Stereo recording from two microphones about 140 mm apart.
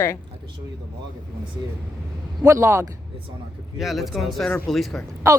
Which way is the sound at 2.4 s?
20° right (ahead or behind).